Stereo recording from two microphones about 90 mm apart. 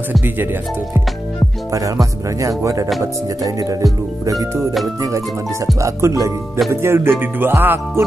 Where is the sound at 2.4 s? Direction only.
40° right (ahead or behind).